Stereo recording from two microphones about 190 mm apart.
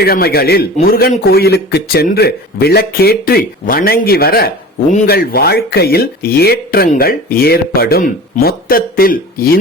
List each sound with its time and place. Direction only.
0.0 s a man's voice: 55° left (ahead or behind)